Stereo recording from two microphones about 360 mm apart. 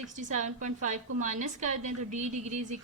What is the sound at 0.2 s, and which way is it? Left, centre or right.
A woman's voice, right.